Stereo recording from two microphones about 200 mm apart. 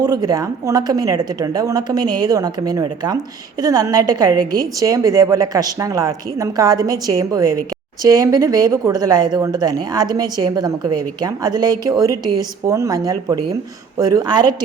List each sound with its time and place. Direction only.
0.0 s a woman's voice: 20° right (ahead or behind)